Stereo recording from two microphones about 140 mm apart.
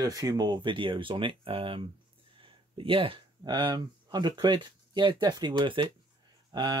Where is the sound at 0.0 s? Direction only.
25° right (ahead or behind).